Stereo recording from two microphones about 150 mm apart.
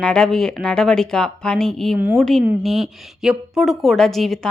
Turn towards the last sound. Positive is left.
turn(degrees=0)  # may be behind; listen again after turning